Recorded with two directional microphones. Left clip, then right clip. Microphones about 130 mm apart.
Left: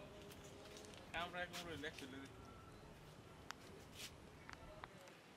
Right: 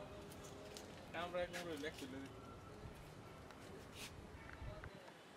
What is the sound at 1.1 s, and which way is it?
Speech, 15° left (ahead or behind).